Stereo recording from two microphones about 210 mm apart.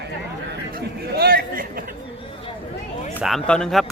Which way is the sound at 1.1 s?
45° right (ahead or behind).